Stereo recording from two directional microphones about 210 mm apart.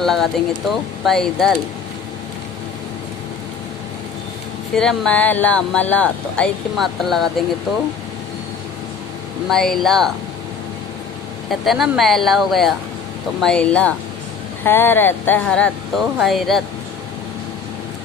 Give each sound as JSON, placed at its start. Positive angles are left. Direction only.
{"t": 0.0, "sound": "speech", "side_deg": 0}
{"t": 4.7, "sound": "speech", "side_deg": 5}
{"t": 9.5, "sound": "speech", "side_deg": 0}
{"t": 11.6, "sound": "speech", "side_deg": 0}